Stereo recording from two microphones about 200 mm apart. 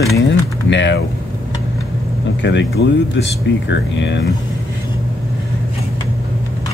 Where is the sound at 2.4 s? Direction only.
60° left (ahead or behind).